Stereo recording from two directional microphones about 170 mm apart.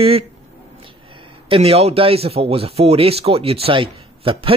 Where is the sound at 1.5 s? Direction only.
35° right (ahead or behind).